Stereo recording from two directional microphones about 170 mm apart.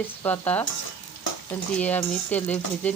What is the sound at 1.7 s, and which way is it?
Frying, 10° left (ahead or behind).